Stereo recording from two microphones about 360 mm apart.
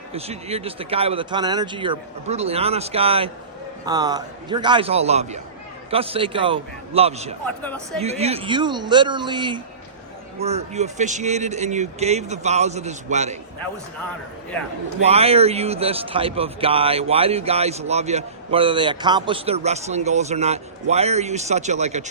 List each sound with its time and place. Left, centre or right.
0.1 s a man's voice: centre
7.4 s speech: centre
8.0 s a man's voice: centre
15.0 s a man's voice: centre